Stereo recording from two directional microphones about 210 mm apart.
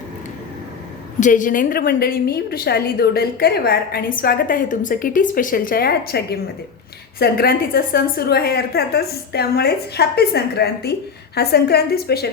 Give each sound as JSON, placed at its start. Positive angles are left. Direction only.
{"t": 1.2, "sound": "a woman's voice", "side_deg": 40}